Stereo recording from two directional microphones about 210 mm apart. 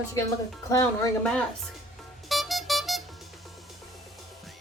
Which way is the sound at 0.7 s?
15° left (ahead or behind).